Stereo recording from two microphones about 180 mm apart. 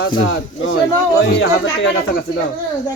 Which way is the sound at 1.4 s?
75° left (ahead or behind).